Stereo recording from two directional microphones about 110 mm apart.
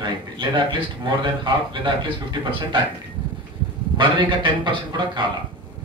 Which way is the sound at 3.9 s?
45° right (ahead or behind).